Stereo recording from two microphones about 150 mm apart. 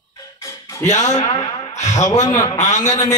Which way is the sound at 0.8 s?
25° left (ahead or behind).